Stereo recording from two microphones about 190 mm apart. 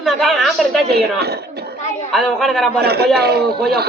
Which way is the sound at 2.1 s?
Centre (ahead or behind).